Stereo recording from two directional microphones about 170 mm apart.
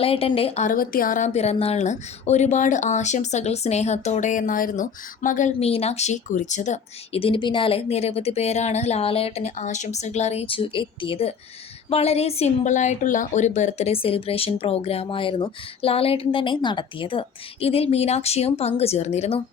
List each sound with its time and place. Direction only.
0.0 s speech: 35° left (ahead or behind); by 5.5 s 50° left (ahead or behind)
5.5 s a woman's voice: 35° left (ahead or behind)